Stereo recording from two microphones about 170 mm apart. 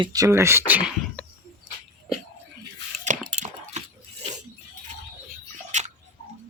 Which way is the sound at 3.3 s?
45° right (ahead or behind).